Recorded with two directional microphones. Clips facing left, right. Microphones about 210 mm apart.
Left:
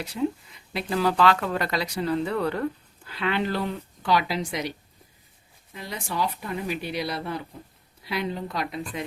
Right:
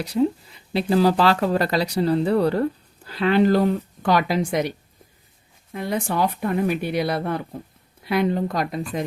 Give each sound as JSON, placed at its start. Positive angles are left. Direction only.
{"t": 0.0, "sound": "speech", "side_deg": -35}
{"t": 5.7, "sound": "speech", "side_deg": -55}